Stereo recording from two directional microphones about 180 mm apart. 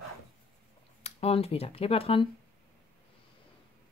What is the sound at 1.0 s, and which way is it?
Speech, 35° left (ahead or behind).